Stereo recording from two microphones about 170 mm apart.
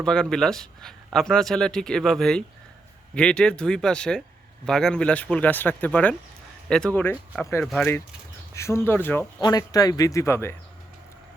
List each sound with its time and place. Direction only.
0.0 s a man's voice: 5° left (ahead or behind)
9.4 s speech: 20° left (ahead or behind)